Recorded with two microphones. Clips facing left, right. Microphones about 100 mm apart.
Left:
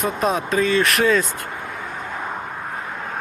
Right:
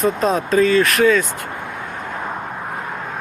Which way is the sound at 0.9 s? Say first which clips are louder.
Right 3 dB; 25° left (ahead or behind).